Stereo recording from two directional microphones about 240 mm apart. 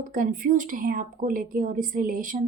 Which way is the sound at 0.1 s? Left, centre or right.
Right.